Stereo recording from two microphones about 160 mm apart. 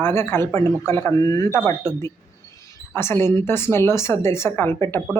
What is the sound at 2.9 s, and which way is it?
Speech, 15° left (ahead or behind).